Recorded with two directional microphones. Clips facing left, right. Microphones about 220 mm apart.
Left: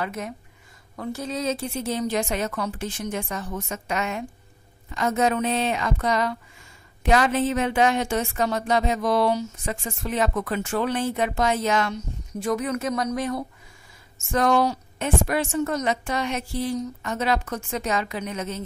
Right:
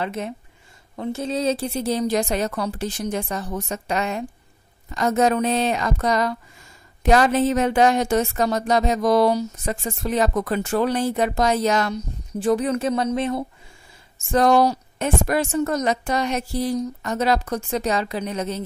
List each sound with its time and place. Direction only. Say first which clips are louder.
0.0 s a woman's voice: right 3 dB; 25° right (ahead or behind)